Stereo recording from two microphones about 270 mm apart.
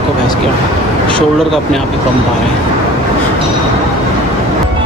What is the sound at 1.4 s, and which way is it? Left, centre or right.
Speech, centre.